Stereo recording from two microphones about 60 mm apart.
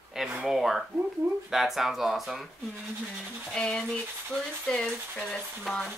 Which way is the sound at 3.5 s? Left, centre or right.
Centre.